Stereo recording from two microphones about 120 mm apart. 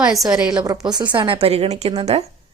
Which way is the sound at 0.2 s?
5° right (ahead or behind).